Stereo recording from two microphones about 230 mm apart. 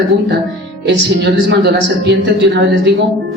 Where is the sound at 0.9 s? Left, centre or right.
Right.